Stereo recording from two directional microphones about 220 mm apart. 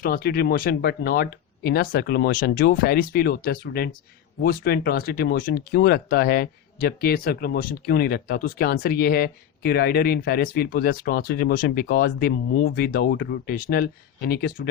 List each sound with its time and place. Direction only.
0.0 s speech: 45° left (ahead or behind)